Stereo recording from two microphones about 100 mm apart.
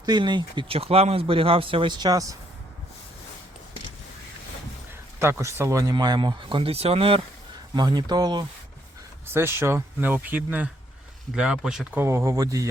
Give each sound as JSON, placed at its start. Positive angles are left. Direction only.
{"t": 0.0, "sound": "speech", "side_deg": -45}
{"t": 0.7, "sound": "speech", "side_deg": -80}
{"t": 5.2, "sound": "speech", "side_deg": -25}
{"t": 7.8, "sound": "speech", "side_deg": -45}
{"t": 9.2, "sound": "speech", "side_deg": -25}
{"t": 11.3, "sound": "speech", "side_deg": -5}
{"t": 11.9, "sound": "speech", "side_deg": -30}